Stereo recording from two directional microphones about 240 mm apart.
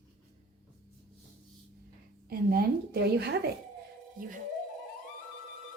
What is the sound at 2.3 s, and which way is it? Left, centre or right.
Speech, right.